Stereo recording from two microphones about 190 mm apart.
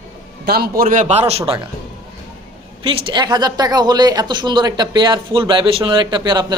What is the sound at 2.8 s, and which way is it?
A woman's voice, 25° right (ahead or behind).